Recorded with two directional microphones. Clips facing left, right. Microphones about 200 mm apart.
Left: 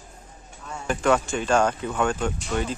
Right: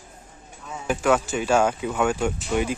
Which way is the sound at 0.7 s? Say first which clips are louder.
Right 1 dB; 5° right (ahead or behind).